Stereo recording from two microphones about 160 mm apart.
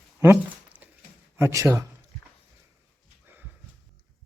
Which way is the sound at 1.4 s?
20° right (ahead or behind).